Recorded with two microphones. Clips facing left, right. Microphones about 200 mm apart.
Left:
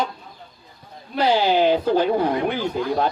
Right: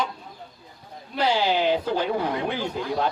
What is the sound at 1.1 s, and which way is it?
Speech, 50° left (ahead or behind).